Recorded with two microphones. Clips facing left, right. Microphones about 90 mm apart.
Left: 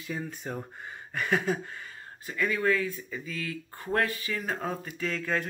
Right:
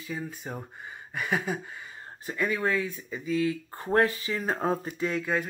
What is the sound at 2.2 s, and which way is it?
Speech, 20° right (ahead or behind).